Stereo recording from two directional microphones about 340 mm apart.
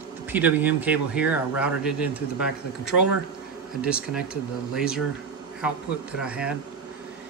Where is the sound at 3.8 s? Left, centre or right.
Centre.